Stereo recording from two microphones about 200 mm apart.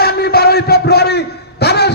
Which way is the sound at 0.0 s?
50° left (ahead or behind).